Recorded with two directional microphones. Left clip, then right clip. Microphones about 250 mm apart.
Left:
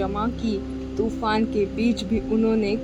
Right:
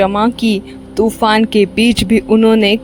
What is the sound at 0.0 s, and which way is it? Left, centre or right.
Speech, right.